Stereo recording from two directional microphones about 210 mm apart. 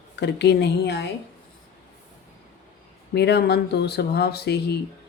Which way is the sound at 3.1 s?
50° left (ahead or behind).